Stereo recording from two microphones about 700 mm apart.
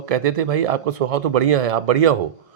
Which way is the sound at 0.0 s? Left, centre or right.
Right.